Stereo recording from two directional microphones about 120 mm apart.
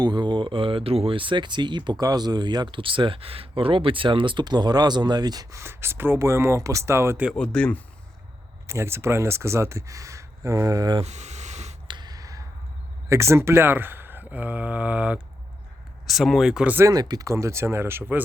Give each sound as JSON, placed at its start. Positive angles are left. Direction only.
{"t": 0.0, "sound": "speech", "side_deg": -40}
{"t": 7.3, "sound": "speech", "side_deg": 10}
{"t": 8.6, "sound": "speech", "side_deg": -25}
{"t": 11.0, "sound": "a sound", "side_deg": -70}
{"t": 11.9, "sound": "a sound", "side_deg": -35}
{"t": 13.1, "sound": "speech", "side_deg": -25}
{"t": 16.7, "sound": "speech", "side_deg": -30}